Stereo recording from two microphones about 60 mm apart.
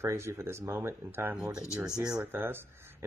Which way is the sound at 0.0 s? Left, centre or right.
Right.